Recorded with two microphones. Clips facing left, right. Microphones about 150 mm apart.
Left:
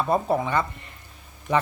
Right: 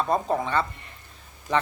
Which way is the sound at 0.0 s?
10° left (ahead or behind).